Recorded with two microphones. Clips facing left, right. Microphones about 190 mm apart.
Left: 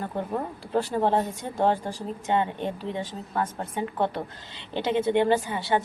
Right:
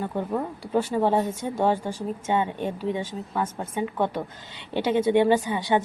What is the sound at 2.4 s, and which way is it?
A woman's voice, 10° right (ahead or behind).